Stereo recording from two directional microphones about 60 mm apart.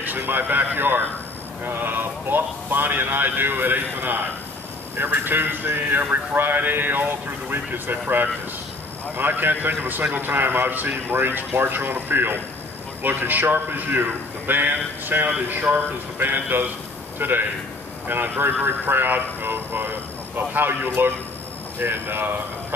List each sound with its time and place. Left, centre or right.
0.0 s speech: right